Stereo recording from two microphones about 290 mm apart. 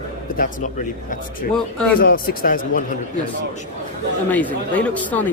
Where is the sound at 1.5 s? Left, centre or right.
Centre.